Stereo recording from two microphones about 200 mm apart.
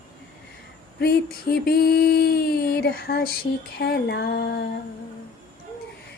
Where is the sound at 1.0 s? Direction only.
50° left (ahead or behind).